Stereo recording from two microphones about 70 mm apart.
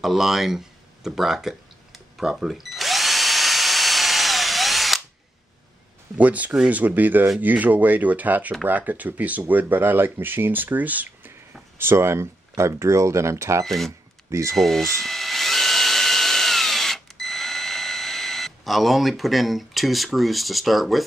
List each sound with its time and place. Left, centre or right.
0.0 s a sound: centre
6.1 s speech: right
11.8 s speech: right
13.7 s speech: centre
14.5 s drill: centre